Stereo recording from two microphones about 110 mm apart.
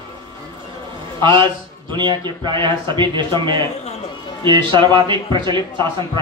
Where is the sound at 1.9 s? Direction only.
45° right (ahead or behind).